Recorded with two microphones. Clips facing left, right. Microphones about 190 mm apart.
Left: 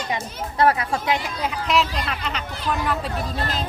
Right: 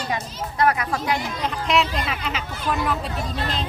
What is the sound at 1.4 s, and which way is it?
Speech, centre (ahead or behind).